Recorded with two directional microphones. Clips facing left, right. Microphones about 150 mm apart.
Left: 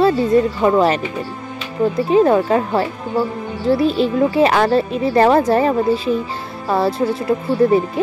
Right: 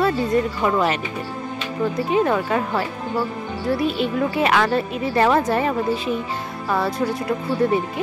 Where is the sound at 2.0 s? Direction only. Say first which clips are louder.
Left 7 dB; 35° left (ahead or behind).